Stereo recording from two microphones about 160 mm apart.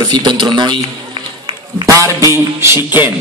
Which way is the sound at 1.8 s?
20° right (ahead or behind).